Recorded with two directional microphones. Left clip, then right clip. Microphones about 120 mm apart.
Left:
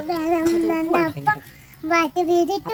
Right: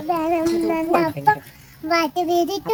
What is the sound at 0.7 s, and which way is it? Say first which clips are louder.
A child's voice: right 1 dB; 20° right (ahead or behind).